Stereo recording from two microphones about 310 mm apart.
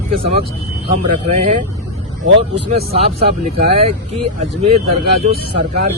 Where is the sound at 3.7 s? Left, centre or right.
Centre.